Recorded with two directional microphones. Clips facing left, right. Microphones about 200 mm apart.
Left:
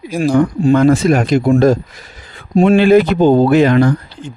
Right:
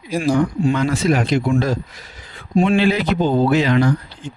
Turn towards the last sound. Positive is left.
turn(degrees=50)  # may be behind; listen again after turning